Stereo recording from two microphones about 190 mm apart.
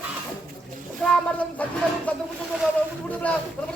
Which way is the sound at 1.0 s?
5° left (ahead or behind).